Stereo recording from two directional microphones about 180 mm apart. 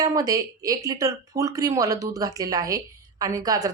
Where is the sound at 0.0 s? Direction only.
20° right (ahead or behind).